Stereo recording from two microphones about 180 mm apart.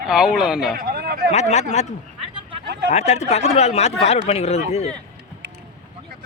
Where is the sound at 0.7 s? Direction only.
55° right (ahead or behind).